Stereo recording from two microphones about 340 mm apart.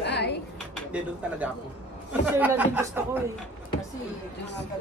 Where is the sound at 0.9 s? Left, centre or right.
Centre.